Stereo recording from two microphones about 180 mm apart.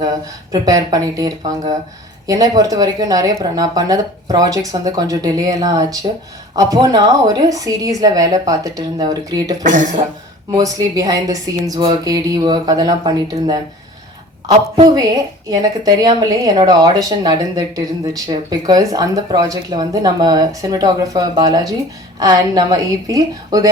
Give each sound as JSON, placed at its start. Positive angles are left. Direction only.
{"t": 0.0, "sound": "a woman's voice", "side_deg": -20}
{"t": 9.6, "sound": "speech", "side_deg": -45}
{"t": 10.6, "sound": "a woman's voice", "side_deg": -20}